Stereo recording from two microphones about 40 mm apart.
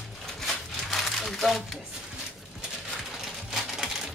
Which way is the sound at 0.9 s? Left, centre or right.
Centre.